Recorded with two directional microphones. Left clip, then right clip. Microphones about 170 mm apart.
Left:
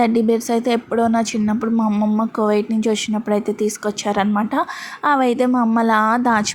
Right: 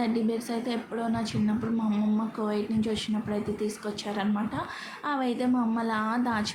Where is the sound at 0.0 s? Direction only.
50° left (ahead or behind).